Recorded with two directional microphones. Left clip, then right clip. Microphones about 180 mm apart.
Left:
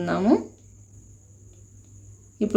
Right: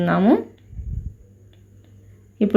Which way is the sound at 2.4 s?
15° right (ahead or behind).